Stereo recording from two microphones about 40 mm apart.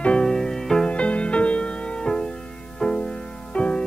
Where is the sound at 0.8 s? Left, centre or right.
Left.